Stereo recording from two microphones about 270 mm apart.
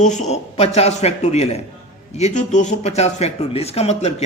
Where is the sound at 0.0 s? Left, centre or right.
Left.